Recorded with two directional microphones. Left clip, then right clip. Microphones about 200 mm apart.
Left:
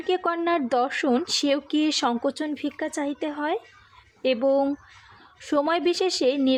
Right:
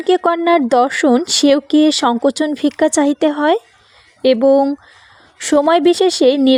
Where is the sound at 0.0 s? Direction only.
40° right (ahead or behind).